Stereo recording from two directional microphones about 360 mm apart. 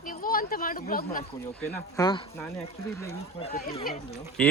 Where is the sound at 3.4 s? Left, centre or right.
Centre.